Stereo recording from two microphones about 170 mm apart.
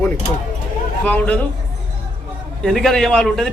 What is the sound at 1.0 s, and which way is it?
Speech, 10° left (ahead or behind).